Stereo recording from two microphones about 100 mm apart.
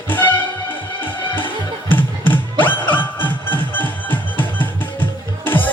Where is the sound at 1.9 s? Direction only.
20° left (ahead or behind).